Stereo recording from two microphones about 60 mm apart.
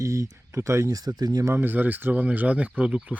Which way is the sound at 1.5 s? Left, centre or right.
Right.